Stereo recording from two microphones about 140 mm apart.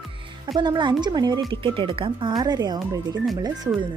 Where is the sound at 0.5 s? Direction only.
35° right (ahead or behind).